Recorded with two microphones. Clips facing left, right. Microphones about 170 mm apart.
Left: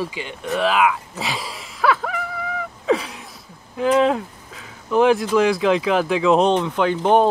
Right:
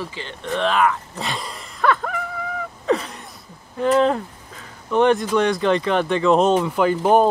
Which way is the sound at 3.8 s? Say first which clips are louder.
Even; centre (ahead or behind).